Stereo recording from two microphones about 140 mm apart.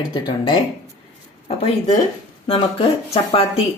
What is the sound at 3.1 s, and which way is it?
Speech, 45° left (ahead or behind).